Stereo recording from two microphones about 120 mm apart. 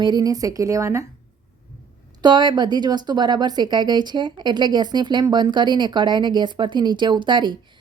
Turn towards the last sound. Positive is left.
turn(degrees=-40)  # may be behind; listen again after turning